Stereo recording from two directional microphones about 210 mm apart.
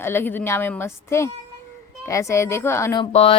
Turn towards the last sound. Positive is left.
turn(degrees=30)  # may be behind; listen again after turning